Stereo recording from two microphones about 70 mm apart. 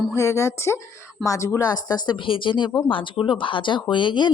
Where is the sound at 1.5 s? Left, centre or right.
Left.